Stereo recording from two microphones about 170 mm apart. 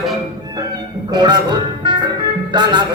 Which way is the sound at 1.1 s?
25° right (ahead or behind).